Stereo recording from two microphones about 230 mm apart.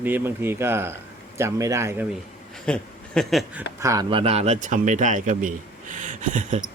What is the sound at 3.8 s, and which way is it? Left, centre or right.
Speech, centre.